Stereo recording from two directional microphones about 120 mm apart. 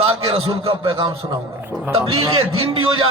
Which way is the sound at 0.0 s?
50° right (ahead or behind).